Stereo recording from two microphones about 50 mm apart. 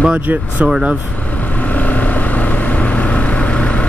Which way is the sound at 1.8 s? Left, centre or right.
Left.